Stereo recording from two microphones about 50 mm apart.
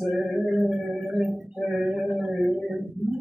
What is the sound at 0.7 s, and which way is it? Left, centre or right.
Gargling, right.